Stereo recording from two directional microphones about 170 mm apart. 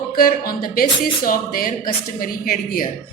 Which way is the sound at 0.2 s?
55° left (ahead or behind).